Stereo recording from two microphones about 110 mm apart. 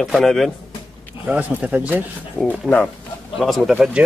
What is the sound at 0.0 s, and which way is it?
Speech, 5° left (ahead or behind).